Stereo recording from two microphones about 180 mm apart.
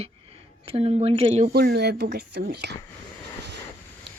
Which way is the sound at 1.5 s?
65° right (ahead or behind).